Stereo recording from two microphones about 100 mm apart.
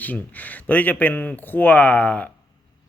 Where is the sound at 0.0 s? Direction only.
15° left (ahead or behind).